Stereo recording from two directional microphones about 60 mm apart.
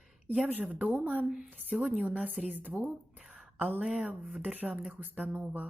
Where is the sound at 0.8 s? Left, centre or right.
Right.